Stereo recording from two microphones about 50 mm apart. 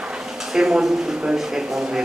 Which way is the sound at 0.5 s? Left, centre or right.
Centre.